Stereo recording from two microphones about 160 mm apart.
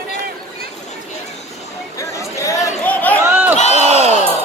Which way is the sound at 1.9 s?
20° left (ahead or behind).